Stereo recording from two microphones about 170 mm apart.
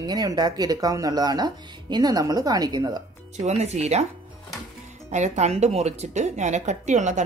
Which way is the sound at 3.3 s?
40° right (ahead or behind).